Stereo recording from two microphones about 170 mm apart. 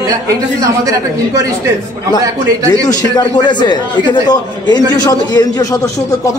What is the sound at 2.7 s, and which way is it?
Speech, 25° left (ahead or behind).